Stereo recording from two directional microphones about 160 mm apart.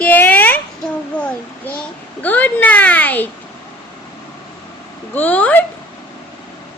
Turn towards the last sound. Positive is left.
turn(degrees=10)  # may be behind; listen again after turning